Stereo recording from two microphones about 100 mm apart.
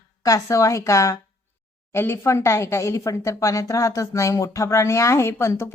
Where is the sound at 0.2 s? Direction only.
35° left (ahead or behind).